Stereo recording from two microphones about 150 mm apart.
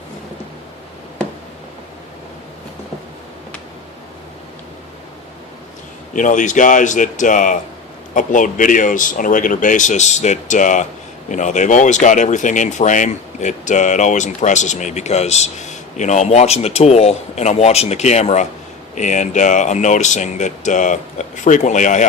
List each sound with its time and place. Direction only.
6.1 s a man's voice: 60° left (ahead or behind)